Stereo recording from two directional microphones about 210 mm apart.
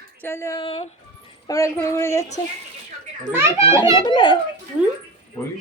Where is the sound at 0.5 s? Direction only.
25° left (ahead or behind).